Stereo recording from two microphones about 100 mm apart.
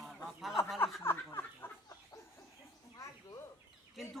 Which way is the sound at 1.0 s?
25° left (ahead or behind).